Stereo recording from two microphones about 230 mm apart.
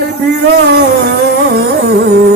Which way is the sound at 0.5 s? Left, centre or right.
Right.